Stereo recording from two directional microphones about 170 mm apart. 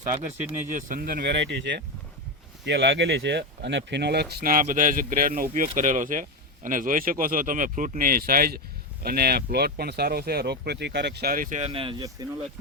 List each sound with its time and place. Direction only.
0.7 s speech: 50° right (ahead or behind)
11.7 s speech: 30° right (ahead or behind)